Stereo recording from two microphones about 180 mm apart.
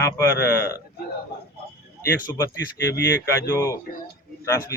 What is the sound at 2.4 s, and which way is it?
Speech, 15° left (ahead or behind).